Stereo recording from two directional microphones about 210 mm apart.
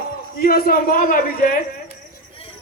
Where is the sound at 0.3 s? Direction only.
45° left (ahead or behind).